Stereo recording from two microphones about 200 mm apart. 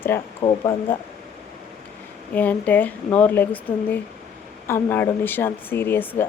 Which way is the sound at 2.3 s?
10° left (ahead or behind).